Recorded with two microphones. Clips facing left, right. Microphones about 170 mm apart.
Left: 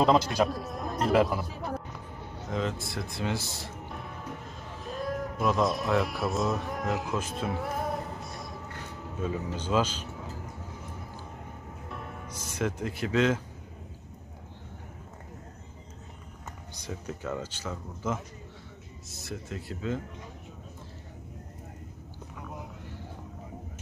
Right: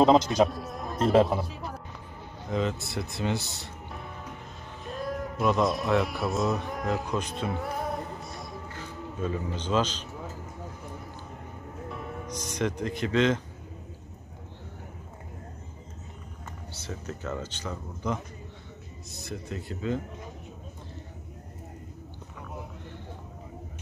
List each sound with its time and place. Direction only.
0.0 s a man's voice: 20° right (ahead or behind)
0.5 s speech: centre (ahead or behind)
1.1 s a man's voice: 25° right (ahead or behind)
2.5 s speech: centre (ahead or behind)
11.9 s music: centre (ahead or behind)
16.7 s speech: 10° left (ahead or behind)